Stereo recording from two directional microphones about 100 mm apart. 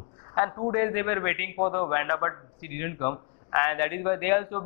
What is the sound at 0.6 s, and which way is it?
Speech, 25° left (ahead or behind).